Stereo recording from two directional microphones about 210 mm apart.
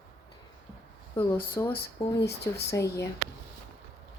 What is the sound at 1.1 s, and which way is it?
Speech, 15° left (ahead or behind).